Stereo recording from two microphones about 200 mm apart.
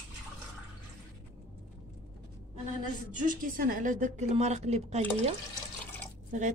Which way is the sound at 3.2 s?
40° right (ahead or behind).